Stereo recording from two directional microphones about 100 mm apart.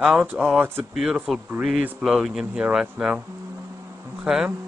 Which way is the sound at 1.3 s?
Centre (ahead or behind).